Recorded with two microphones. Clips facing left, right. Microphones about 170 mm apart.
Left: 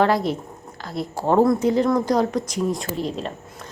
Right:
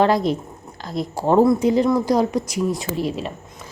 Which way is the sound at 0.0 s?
15° right (ahead or behind).